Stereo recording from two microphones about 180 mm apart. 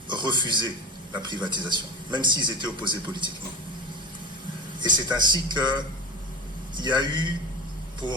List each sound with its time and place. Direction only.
0.1 s a man's voice: 25° right (ahead or behind)
4.8 s a man's voice: 25° right (ahead or behind)